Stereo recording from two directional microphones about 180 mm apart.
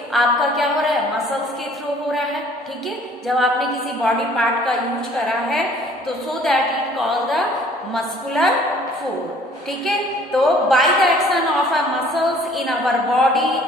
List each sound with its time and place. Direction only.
0.1 s a woman's voice: centre (ahead or behind)
10.4 s a woman's voice: centre (ahead or behind)